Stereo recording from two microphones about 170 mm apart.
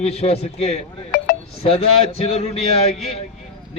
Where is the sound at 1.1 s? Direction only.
60° left (ahead or behind).